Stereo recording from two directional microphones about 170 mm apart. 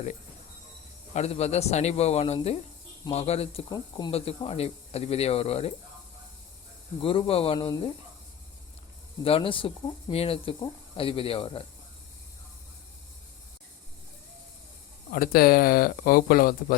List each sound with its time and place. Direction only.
1.1 s speech: 40° left (ahead or behind)
3.7 s speech: 25° left (ahead or behind)
7.0 s speech: 30° left (ahead or behind)
9.2 s speech: 30° left (ahead or behind)
15.1 s speech: 60° left (ahead or behind)